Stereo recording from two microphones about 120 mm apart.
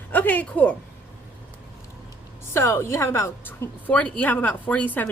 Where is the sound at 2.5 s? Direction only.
20° left (ahead or behind).